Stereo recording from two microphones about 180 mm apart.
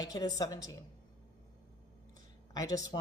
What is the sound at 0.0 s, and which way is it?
Speech, 20° left (ahead or behind).